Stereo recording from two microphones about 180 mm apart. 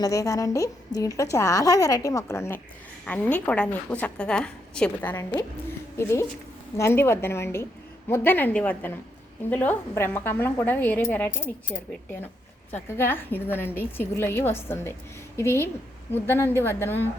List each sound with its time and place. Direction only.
0.0 s a woman's voice: 20° left (ahead or behind)
5.1 s a woman's voice: 20° left (ahead or behind)